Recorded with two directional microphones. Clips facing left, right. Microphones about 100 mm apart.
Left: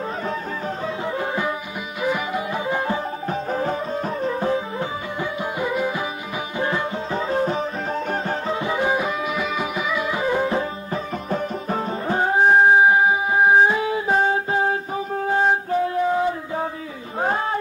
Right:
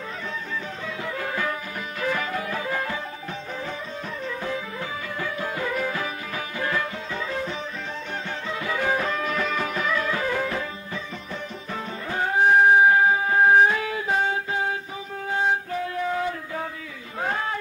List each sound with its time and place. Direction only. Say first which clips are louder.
1.0 s music: left 3 dB; 25° left (ahead or behind)
3.3 s music: left 12 dB; 45° left (ahead or behind)
8.5 s music: left 1 dB; 25° left (ahead or behind)
11.2 s music: left 9 dB; 45° left (ahead or behind)
12.1 s music: left 3 dB; 30° left (ahead or behind)
17.2 s a sound: left 5 dB; 30° left (ahead or behind)